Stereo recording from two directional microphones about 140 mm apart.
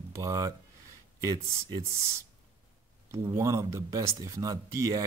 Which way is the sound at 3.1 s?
20° right (ahead or behind).